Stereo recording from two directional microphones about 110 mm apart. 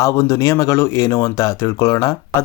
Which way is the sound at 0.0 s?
30° left (ahead or behind).